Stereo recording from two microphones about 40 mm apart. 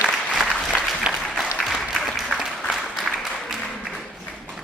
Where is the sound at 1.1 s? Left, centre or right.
Centre.